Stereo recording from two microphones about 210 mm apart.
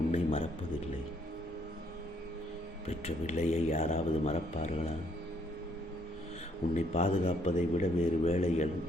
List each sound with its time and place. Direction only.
0.1 s a sound: 25° left (ahead or behind)
2.8 s speech: 30° left (ahead or behind)
6.7 s a man's voice: 30° left (ahead or behind)